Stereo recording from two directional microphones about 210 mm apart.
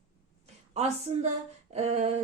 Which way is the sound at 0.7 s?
30° right (ahead or behind).